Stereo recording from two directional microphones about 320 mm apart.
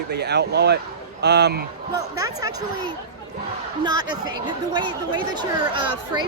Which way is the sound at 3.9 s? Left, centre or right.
Centre.